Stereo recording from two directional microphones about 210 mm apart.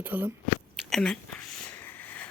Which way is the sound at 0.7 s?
Centre (ahead or behind).